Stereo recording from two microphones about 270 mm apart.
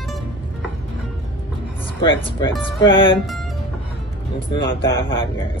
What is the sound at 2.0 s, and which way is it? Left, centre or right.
Speech, centre.